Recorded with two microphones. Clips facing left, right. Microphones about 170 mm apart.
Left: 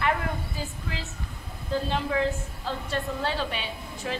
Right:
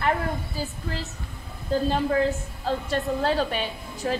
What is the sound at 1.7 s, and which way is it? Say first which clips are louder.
A woman's voice: right 4 dB; 40° right (ahead or behind).